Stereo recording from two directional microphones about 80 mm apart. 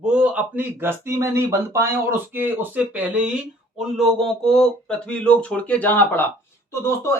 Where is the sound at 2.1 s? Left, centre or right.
Right; by 6.2 s left.